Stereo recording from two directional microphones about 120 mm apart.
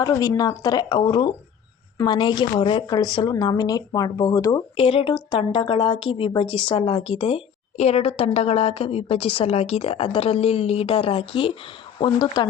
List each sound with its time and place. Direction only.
0.0 s speech: 30° left (ahead or behind)
4.8 s a woman's voice: 50° left (ahead or behind)